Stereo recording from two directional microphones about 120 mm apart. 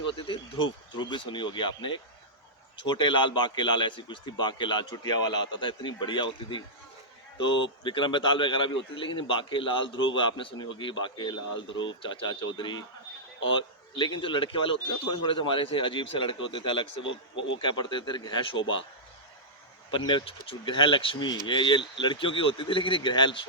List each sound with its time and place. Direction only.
0.0 s a man's voice: 40° left (ahead or behind)
19.9 s speech: 40° left (ahead or behind)